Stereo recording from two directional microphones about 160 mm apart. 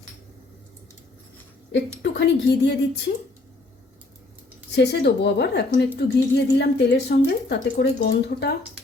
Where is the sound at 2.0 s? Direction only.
90° left.